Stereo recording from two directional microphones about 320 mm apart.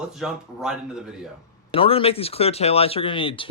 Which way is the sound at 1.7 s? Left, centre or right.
Centre.